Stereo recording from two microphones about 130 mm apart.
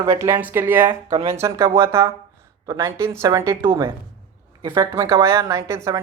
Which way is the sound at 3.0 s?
20° right (ahead or behind).